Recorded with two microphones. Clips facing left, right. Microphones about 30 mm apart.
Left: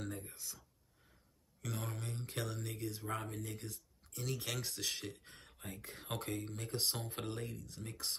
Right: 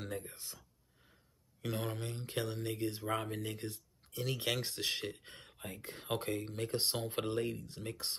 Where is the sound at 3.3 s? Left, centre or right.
Right.